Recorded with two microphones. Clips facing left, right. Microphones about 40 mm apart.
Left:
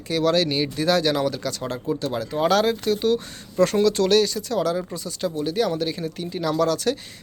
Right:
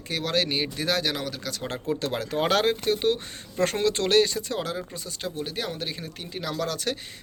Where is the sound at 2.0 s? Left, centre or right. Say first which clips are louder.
Left 4 dB; right.